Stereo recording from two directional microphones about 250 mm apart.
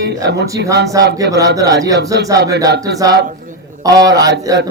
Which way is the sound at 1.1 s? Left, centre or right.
Centre.